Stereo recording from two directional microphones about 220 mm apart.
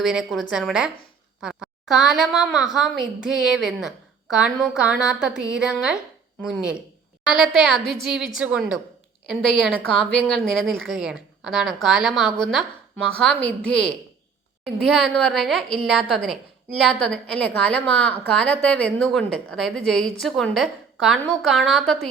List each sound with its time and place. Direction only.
0.0 s a woman's voice: centre (ahead or behind)